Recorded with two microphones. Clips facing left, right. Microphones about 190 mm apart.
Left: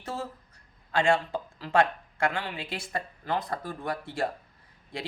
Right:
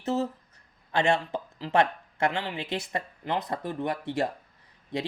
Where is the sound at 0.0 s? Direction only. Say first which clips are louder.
Right 8 dB; 20° right (ahead or behind).